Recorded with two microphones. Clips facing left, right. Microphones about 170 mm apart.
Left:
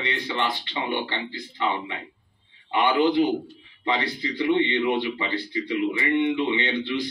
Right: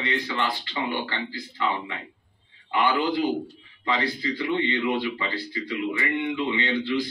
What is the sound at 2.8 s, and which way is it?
Speech, 25° left (ahead or behind).